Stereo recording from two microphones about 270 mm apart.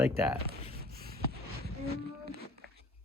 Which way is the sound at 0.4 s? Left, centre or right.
Right.